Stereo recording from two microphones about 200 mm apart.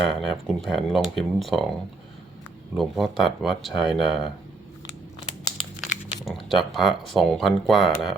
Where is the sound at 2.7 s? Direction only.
Centre (ahead or behind).